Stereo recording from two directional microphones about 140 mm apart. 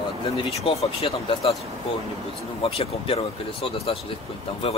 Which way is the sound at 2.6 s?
40° left (ahead or behind).